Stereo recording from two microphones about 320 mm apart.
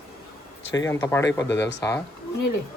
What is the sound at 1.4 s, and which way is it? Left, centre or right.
Speech, left.